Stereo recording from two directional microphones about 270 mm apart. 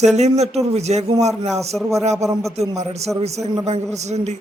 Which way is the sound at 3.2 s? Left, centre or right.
Right.